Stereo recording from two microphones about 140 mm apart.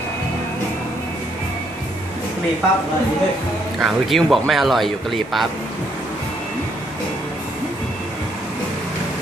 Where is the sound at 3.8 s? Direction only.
Centre (ahead or behind).